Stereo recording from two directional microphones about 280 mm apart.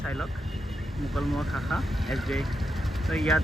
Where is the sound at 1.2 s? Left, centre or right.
Centre.